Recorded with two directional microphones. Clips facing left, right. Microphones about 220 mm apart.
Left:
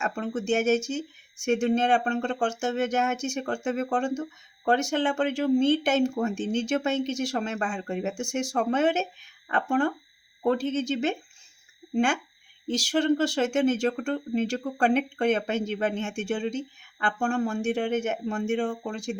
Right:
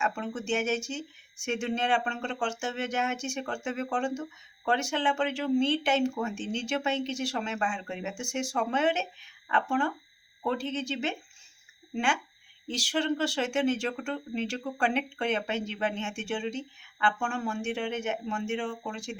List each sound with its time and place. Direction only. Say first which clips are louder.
0.0 s speech: left 3 dB; 40° left (ahead or behind)